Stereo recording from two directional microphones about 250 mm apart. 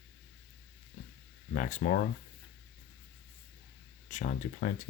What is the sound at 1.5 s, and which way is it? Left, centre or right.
Speech, left.